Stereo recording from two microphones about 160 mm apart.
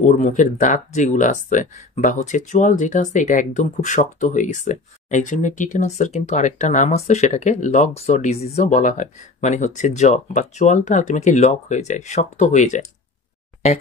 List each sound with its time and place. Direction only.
0.0 s speech: 50° left (ahead or behind)